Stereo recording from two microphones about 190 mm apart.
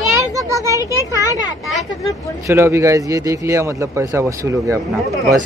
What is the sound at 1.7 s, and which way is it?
Speech, centre (ahead or behind).